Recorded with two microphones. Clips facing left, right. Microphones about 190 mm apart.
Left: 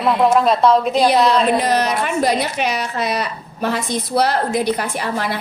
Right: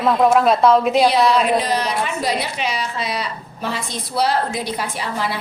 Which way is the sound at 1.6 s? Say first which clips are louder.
Left 3 dB; 60° left (ahead or behind).